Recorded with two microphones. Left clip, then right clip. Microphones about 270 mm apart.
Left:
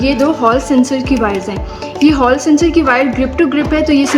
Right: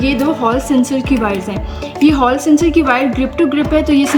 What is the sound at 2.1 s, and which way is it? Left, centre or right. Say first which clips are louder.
A woman's voice: left 1 dB; right.